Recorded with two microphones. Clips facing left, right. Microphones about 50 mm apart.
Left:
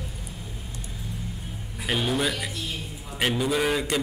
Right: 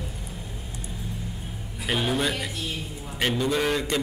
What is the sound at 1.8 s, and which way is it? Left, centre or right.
A man's voice, centre.